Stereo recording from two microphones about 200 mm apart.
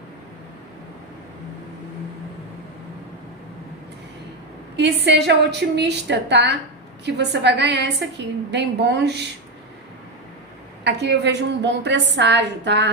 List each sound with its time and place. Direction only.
4.8 s a woman's voice: 55° right (ahead or behind)
10.8 s a woman's voice: 60° right (ahead or behind)